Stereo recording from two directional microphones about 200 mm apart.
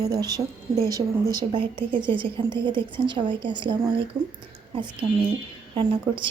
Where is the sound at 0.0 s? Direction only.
20° right (ahead or behind).